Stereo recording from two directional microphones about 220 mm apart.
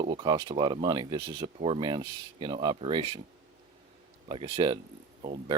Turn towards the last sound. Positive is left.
turn(degrees=-30)  # may be behind; listen again after turning